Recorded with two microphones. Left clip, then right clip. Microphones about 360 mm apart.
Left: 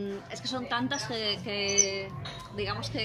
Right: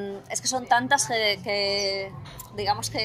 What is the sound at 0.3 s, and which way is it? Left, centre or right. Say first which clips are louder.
A woman's voice: right 11 dB; centre.